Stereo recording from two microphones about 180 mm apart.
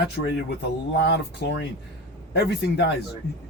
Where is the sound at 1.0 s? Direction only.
70° left (ahead or behind).